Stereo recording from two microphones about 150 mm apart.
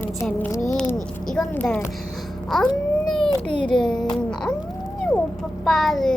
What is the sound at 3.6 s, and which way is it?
Speech, 5° left (ahead or behind).